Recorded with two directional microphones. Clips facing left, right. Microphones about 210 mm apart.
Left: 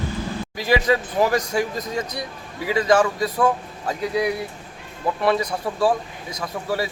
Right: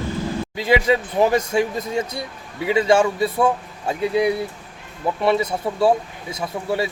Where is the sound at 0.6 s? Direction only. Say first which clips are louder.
Right 2 dB; 25° right (ahead or behind).